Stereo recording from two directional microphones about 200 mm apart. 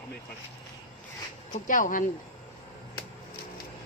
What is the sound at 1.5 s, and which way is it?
Speech, 40° left (ahead or behind).